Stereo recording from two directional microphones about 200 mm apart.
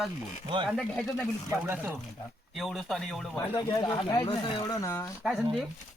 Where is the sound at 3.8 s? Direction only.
20° left (ahead or behind).